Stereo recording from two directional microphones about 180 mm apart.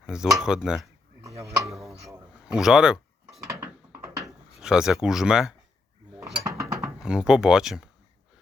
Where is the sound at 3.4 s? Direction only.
15° right (ahead or behind).